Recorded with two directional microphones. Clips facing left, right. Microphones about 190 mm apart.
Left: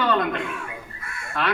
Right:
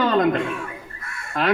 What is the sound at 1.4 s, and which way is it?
Speech, 40° right (ahead or behind).